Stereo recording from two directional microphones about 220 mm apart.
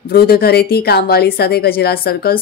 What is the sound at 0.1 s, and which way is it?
Speech, 45° left (ahead or behind).